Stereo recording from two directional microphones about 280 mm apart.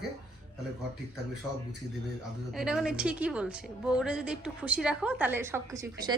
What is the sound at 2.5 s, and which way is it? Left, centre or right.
A woman's voice, centre.